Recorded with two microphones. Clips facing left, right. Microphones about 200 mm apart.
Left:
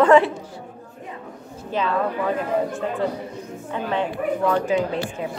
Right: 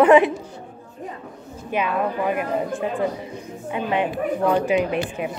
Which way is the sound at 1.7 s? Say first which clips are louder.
Even; 15° right (ahead or behind).